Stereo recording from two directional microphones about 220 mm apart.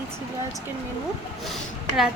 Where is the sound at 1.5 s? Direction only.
Centre (ahead or behind).